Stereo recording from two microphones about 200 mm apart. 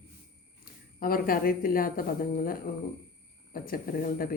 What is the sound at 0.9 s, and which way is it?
Speech, 45° left (ahead or behind).